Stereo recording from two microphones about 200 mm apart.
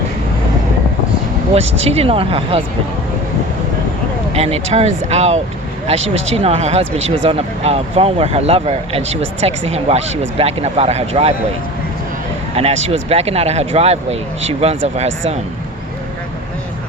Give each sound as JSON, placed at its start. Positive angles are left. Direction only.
{"t": 1.5, "sound": "speech", "side_deg": -30}
{"t": 4.4, "sound": "speech", "side_deg": -30}
{"t": 12.5, "sound": "speech", "side_deg": -30}